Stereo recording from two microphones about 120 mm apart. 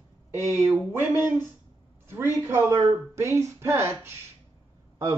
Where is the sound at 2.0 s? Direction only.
20° right (ahead or behind).